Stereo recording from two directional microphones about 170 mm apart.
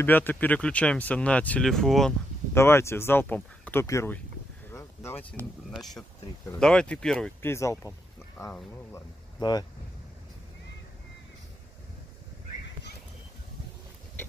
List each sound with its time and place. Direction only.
0.0 s speech: 10° left (ahead or behind)
2.5 s speech: 15° left (ahead or behind)
4.6 s a sound: 15° left (ahead or behind)
5.7 s speech: centre (ahead or behind)
7.4 s speech: 15° left (ahead or behind)